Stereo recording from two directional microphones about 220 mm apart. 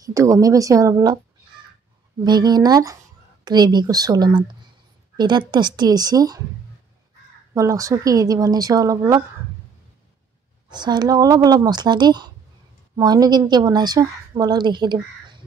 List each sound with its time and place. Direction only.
0.0 s speech: 15° right (ahead or behind)
2.2 s speech: 20° right (ahead or behind)
7.5 s speech: 15° right (ahead or behind)
10.7 s speech: 20° right (ahead or behind)